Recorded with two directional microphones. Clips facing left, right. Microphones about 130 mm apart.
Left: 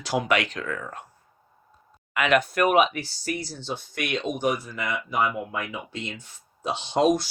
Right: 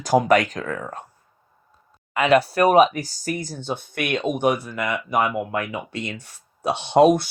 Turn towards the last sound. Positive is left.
turn(degrees=-60)  # may be behind; listen again after turning